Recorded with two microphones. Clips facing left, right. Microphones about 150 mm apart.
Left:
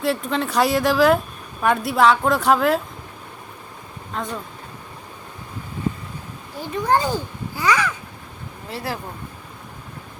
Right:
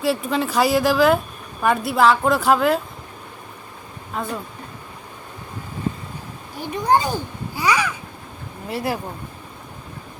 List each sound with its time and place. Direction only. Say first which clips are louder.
0.0 s speech: right 1 dB; 5° right (ahead or behind)
4.1 s speech: right 1 dB; 5° right (ahead or behind)
6.6 s a child's voice: right 1 dB; 15° right (ahead or behind)